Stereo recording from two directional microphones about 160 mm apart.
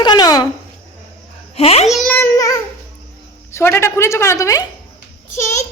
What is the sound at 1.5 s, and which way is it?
Speech, 40° left (ahead or behind).